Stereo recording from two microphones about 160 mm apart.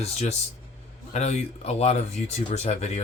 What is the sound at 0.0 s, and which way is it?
Speech, 45° left (ahead or behind).